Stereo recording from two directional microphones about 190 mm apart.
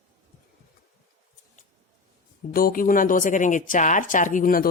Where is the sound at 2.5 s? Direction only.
50° left (ahead or behind).